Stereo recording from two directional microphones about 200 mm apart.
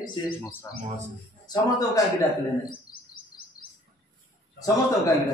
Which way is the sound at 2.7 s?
45° left (ahead or behind).